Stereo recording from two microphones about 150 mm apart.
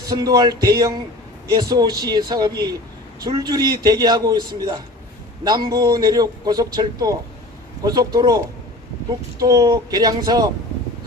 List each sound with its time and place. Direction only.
0.1 s a man's voice: 25° right (ahead or behind)